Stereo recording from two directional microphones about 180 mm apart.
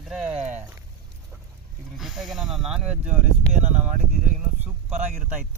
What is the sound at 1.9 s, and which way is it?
Speech, centre (ahead or behind).